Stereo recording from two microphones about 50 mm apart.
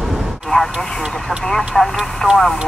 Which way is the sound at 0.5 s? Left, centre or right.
Left.